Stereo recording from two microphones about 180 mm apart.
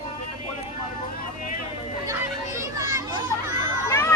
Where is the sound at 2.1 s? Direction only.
20° right (ahead or behind).